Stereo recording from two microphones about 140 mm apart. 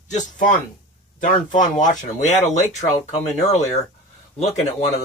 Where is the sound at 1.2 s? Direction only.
65° left (ahead or behind).